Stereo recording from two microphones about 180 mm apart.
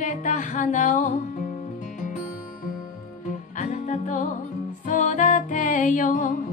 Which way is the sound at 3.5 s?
40° left (ahead or behind).